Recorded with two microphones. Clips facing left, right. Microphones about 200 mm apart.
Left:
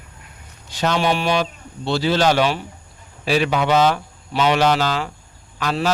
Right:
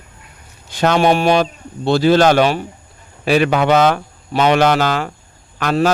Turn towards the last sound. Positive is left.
turn(degrees=-50)  # may be behind; listen again after turning